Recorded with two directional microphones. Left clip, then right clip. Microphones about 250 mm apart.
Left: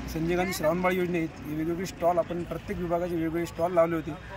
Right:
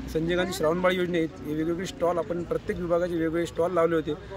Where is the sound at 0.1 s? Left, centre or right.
Centre.